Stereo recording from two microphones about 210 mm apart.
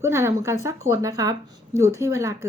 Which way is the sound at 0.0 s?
15° right (ahead or behind).